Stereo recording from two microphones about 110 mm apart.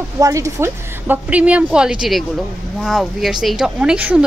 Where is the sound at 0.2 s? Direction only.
30° right (ahead or behind).